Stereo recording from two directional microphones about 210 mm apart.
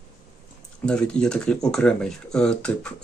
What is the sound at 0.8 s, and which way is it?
Speech, 5° left (ahead or behind).